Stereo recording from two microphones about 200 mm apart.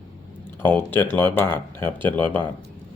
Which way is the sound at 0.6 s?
10° left (ahead or behind).